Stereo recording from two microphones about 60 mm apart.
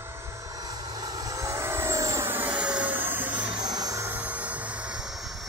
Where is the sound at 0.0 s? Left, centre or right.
Right.